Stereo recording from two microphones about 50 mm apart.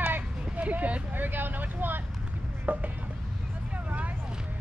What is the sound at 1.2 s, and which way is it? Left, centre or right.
Speech, right.